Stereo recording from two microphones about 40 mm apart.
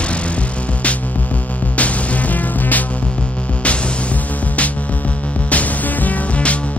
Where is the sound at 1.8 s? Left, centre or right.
Left.